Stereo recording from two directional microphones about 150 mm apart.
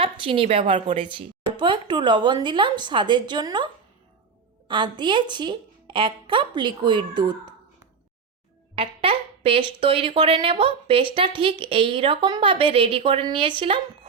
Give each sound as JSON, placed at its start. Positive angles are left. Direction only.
{"t": 0.0, "sound": "a woman's voice", "side_deg": -35}
{"t": 4.7, "sound": "speech", "side_deg": -30}
{"t": 8.7, "sound": "a sound", "side_deg": -40}
{"t": 9.8, "sound": "speech", "side_deg": -40}